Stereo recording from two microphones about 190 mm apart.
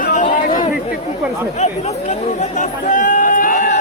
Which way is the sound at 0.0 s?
45° left (ahead or behind).